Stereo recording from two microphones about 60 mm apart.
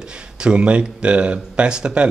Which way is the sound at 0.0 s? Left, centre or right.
Centre.